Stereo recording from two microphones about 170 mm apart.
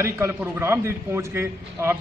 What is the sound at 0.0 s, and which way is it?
A man's voice, 15° right (ahead or behind).